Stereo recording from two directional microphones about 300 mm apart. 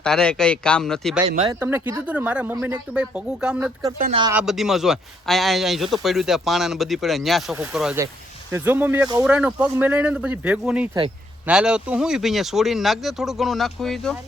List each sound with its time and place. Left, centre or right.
0.0 s speech: centre
3.9 s speech: right
4.2 s speech: centre